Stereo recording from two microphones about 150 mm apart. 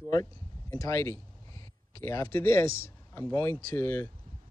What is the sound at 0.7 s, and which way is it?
Speech, 20° left (ahead or behind).